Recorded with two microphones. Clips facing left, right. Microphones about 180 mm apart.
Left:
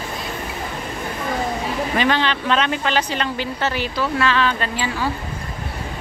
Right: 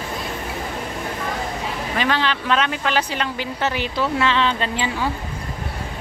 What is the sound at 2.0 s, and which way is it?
A woman's voice, centre (ahead or behind).